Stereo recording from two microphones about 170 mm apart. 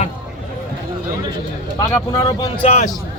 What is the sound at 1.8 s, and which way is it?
Speech, 20° left (ahead or behind).